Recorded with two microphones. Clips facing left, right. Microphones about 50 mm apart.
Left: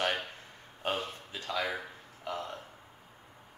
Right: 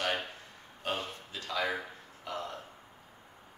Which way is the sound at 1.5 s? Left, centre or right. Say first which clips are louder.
Right 1 dB; centre.